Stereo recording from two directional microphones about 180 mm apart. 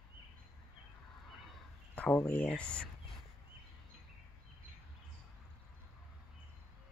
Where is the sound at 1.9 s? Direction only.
10° left (ahead or behind).